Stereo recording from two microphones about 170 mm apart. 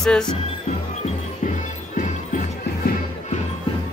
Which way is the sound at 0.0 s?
5° left (ahead or behind).